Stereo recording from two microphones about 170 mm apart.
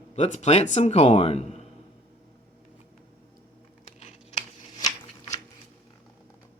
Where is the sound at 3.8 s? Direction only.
40° left (ahead or behind).